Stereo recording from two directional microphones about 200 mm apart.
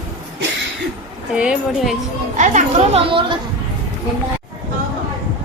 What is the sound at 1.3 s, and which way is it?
Speech, 5° right (ahead or behind).